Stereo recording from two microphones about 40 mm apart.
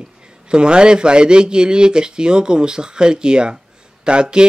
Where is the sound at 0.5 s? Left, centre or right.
Right.